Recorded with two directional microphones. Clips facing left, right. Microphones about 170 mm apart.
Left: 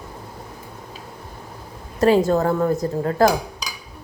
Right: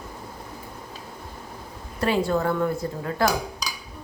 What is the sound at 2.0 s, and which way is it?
A woman's voice, 40° left (ahead or behind).